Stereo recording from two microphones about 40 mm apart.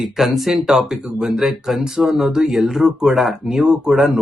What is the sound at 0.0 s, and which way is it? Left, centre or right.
Speech, centre.